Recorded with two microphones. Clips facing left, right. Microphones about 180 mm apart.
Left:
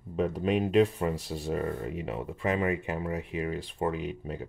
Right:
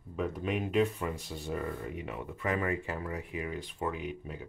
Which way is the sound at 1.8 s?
25° left (ahead or behind).